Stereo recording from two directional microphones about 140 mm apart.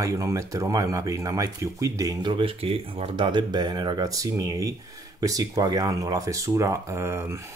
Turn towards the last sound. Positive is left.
turn(degrees=-20)  # may be behind; listen again after turning